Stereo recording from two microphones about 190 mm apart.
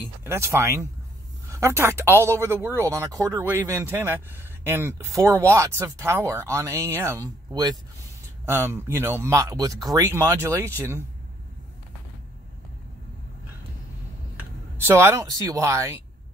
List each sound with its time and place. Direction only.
0.0 s speech: 15° right (ahead or behind)
14.9 s speech: 10° right (ahead or behind)